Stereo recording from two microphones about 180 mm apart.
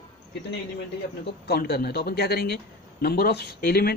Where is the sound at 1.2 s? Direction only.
60° left (ahead or behind).